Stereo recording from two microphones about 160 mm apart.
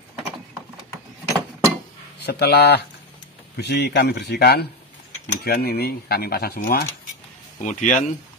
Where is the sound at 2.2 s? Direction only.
90° left.